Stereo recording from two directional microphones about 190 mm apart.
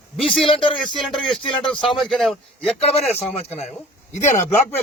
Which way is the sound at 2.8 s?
35° left (ahead or behind).